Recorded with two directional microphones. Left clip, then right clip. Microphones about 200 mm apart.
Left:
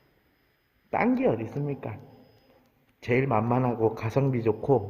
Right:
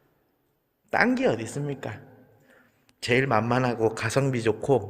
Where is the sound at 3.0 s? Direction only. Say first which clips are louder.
Right 2 dB; centre (ahead or behind).